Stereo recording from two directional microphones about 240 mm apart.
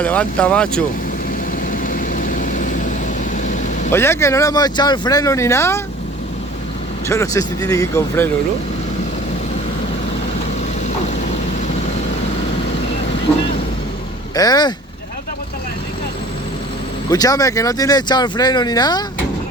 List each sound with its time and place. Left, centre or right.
0.0 s speech: centre
1.7 s vehicle: left
3.9 s speech: centre
7.1 s speech: centre
14.3 s speech: centre
17.1 s speech: centre